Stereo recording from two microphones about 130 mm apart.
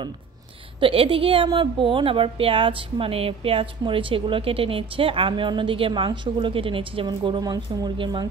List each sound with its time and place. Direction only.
0.7 s a woman's voice: 45° right (ahead or behind)